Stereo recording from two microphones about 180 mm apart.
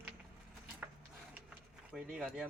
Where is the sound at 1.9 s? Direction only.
5° right (ahead or behind).